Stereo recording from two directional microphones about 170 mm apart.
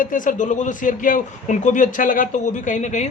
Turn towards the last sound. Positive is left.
turn(degrees=45)  # may be behind; listen again after turning